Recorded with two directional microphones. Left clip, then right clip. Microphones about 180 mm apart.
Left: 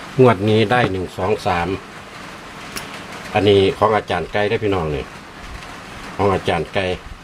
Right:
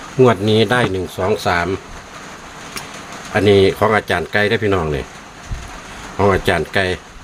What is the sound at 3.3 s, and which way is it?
Speech, 30° right (ahead or behind).